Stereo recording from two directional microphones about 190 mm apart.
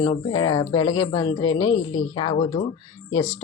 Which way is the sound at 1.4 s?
90° left.